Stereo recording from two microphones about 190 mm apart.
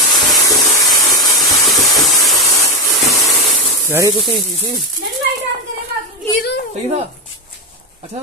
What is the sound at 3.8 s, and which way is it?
Speech, 10° right (ahead or behind).